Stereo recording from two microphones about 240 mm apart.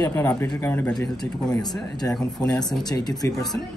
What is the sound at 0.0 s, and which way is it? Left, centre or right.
Speech, centre.